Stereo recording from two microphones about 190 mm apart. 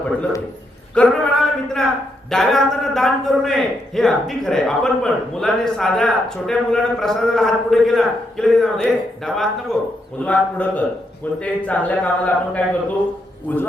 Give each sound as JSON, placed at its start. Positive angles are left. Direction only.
{"t": 0.0, "sound": "a man's voice", "side_deg": 5}